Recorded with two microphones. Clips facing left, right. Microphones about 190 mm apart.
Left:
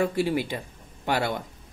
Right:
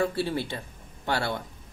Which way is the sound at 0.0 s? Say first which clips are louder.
Left 3 dB; 15° left (ahead or behind).